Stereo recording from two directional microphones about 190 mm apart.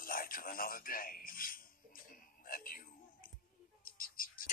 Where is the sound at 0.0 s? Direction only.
50° left (ahead or behind).